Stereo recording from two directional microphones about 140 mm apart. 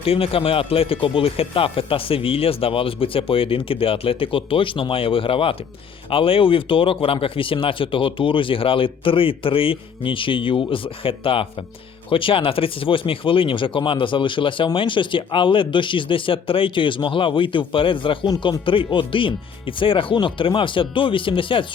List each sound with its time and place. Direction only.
0.0 s speech: 45° left (ahead or behind)